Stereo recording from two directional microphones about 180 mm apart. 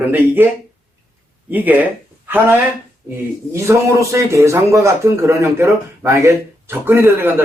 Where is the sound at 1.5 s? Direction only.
10° right (ahead or behind).